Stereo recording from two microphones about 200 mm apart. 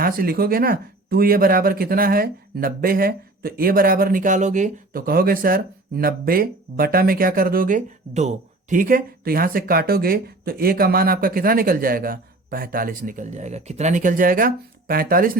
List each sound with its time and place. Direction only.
0.0 s speech: 50° right (ahead or behind)